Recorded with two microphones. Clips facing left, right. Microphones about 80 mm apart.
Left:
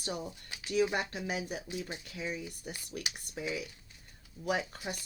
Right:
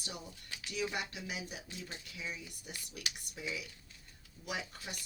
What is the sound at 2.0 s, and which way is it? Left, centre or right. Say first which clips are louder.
Speech: left 6 dB; left.